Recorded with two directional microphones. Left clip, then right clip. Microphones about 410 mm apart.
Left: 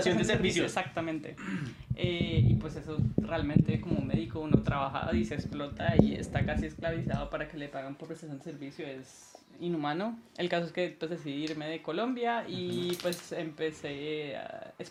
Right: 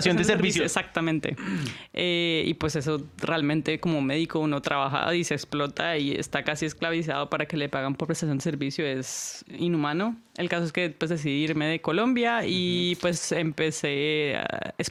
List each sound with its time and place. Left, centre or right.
0.0 s speech: right
0.7 s speech: right
9.6 s speech: right